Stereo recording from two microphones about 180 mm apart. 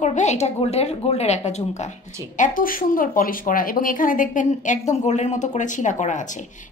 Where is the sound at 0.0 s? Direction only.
40° left (ahead or behind).